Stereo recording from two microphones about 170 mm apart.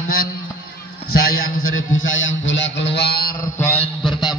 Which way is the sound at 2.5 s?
90° left.